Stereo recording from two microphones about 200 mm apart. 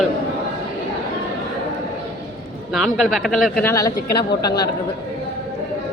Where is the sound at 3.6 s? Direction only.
15° left (ahead or behind).